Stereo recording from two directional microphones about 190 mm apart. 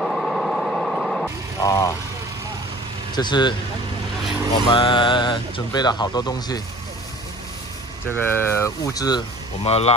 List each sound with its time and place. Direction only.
0.0 s vehicle: centre (ahead or behind)
1.6 s speech: 20° left (ahead or behind)
3.2 s speech: 25° left (ahead or behind)
4.7 s speech: 25° left (ahead or behind)
8.1 s speech: 10° left (ahead or behind)
9.6 s speech: 30° left (ahead or behind)